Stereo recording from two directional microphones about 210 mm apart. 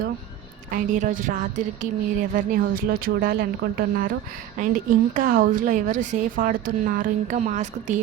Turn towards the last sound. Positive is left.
turn(degrees=-35)  # may be behind; listen again after turning